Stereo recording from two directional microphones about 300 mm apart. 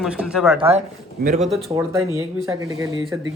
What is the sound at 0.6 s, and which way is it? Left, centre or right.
Speech, centre.